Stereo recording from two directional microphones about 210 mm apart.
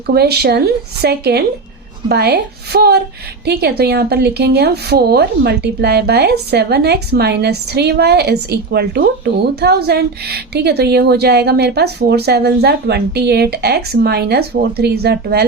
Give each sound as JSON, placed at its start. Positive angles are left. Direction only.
{"t": 0.1, "sound": "a woman's voice", "side_deg": -50}